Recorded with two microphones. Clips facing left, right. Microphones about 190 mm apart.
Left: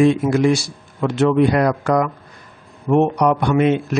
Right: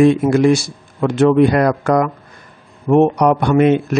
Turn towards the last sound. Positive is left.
turn(degrees=-55)  # may be behind; listen again after turning